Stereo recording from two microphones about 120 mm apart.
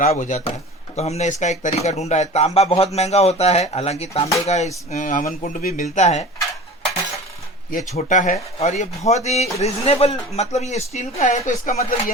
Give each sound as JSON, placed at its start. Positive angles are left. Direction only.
{"t": 0.0, "sound": "speech", "side_deg": 90}
{"t": 0.9, "sound": "speech", "side_deg": 65}
{"t": 4.4, "sound": "speech", "side_deg": 70}
{"t": 4.9, "sound": "speech", "side_deg": 90}
{"t": 7.8, "sound": "speech", "side_deg": 80}
{"t": 8.5, "sound": "speech", "side_deg": 70}